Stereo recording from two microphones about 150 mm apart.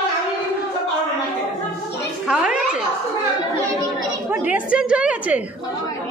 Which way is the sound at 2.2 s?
5° right (ahead or behind).